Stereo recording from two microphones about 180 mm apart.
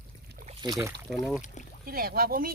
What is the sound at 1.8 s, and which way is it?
Speech, 55° right (ahead or behind).